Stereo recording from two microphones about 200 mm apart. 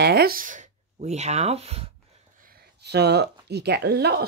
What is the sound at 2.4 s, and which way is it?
Speech, 50° right (ahead or behind).